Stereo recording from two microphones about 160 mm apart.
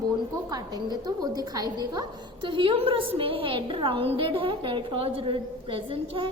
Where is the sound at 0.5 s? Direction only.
25° right (ahead or behind).